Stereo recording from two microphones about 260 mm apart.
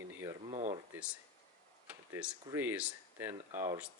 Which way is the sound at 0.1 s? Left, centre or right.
Centre.